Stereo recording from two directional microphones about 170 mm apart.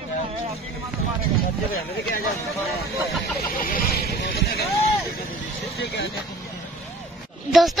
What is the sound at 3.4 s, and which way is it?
Speech, 60° left (ahead or behind).